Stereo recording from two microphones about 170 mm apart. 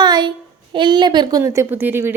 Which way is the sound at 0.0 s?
25° right (ahead or behind).